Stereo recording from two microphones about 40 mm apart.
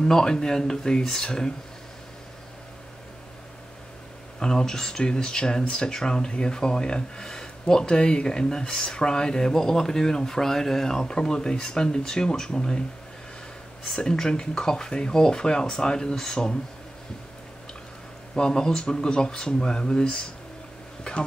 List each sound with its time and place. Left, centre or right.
0.0 s speech: centre
4.4 s speech: centre
13.9 s speech: centre
18.3 s speech: left